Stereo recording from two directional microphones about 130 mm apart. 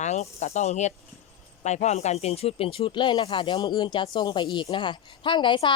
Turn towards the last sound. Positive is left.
turn(degrees=40)  # may be behind; listen again after turning